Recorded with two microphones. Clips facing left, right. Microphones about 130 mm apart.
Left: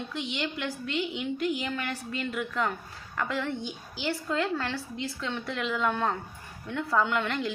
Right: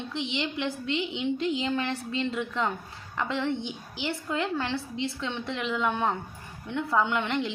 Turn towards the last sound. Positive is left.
turn(degrees=-20)  # may be behind; listen again after turning